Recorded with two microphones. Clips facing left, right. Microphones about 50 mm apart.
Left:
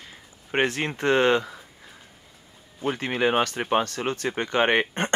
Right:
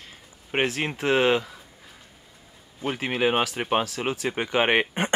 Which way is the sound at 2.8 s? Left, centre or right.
Centre.